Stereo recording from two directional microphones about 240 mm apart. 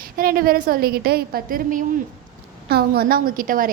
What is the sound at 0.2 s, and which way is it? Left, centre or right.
A woman's voice, right.